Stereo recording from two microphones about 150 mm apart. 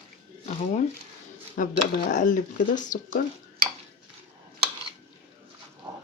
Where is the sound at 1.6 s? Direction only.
60° left (ahead or behind).